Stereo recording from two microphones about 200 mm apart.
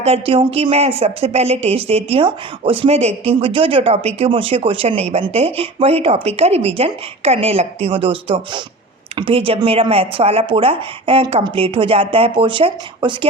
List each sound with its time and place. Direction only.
0.0 s a woman's voice: 30° right (ahead or behind)